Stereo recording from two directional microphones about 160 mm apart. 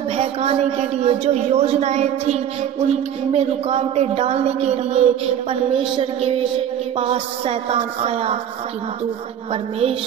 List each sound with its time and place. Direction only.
0.1 s a woman's voice: 40° right (ahead or behind)
9.5 s a woman's voice: 35° right (ahead or behind)